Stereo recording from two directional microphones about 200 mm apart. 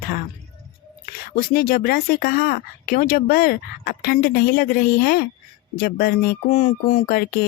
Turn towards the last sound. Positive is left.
turn(degrees=35)  # may be behind; listen again after turning